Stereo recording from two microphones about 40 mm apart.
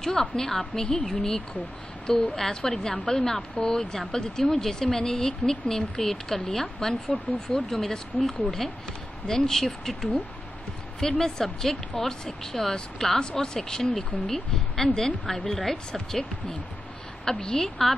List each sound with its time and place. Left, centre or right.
0.0 s speech: centre
3.5 s speech: left
4.1 s speech: centre